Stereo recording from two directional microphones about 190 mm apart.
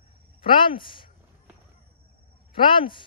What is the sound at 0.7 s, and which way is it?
Speech, 25° left (ahead or behind).